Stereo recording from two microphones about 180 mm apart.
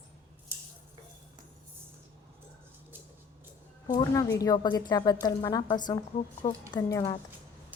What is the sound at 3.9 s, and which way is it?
A woman's voice, 20° left (ahead or behind).